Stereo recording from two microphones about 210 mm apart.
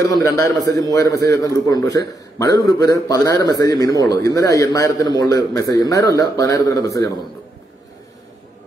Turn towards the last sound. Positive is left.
turn(degrees=15)  # may be behind; listen again after turning